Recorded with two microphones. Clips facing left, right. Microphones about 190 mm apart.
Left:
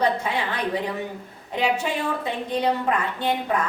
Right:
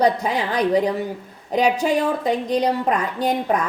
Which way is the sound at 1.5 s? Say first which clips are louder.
Right 6 dB; 40° right (ahead or behind).